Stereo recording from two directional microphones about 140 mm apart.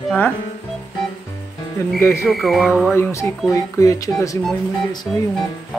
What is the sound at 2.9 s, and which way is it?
Speech, 20° left (ahead or behind).